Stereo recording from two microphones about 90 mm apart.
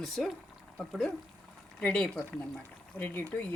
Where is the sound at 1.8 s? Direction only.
15° left (ahead or behind).